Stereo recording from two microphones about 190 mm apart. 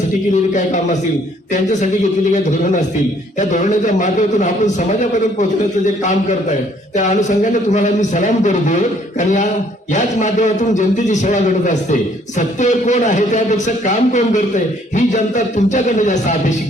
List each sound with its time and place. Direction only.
0.5 s a man's voice: 40° left (ahead or behind)
3.3 s a man's voice: 40° left (ahead or behind)